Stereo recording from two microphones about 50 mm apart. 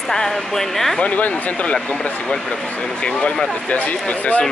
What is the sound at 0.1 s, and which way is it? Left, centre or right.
Speech, centre.